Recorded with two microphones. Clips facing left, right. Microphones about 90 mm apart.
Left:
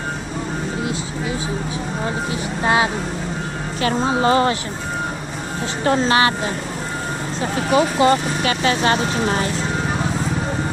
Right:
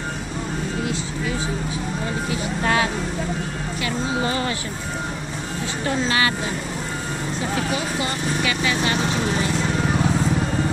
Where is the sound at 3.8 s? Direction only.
40° left (ahead or behind).